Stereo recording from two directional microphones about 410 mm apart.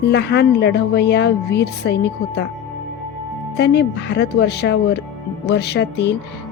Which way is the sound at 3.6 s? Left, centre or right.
Left.